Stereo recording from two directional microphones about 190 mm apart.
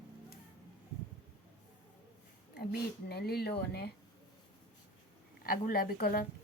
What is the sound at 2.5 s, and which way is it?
A woman's voice, 60° left (ahead or behind).